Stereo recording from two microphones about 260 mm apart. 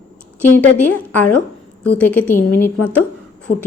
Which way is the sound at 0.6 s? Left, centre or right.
Centre.